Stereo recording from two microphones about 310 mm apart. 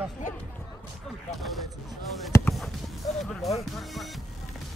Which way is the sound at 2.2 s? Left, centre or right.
Centre.